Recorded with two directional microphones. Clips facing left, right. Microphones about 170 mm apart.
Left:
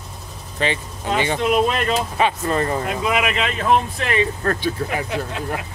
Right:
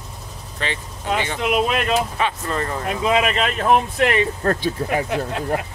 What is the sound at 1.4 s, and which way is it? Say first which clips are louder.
Speech: left 1 dB; 10° right (ahead or behind).